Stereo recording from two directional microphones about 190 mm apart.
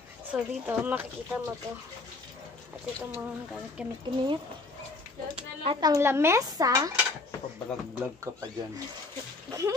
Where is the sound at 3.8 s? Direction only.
5° right (ahead or behind).